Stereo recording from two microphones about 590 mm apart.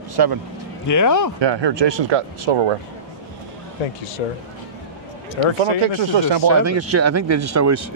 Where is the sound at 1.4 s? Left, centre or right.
Right.